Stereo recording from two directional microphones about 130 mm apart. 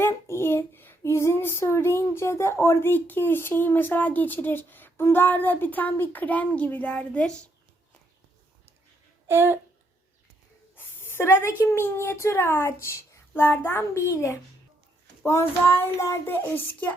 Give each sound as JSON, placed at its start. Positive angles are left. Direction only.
{"t": 0.0, "sound": "child singing", "side_deg": 20}
{"t": 9.2, "sound": "a sound", "side_deg": -20}
{"t": 10.8, "sound": "a sound", "side_deg": 15}
{"t": 11.6, "sound": "speech", "side_deg": 20}
{"t": 13.7, "sound": "child singing", "side_deg": 20}
{"t": 15.2, "sound": "child singing", "side_deg": 20}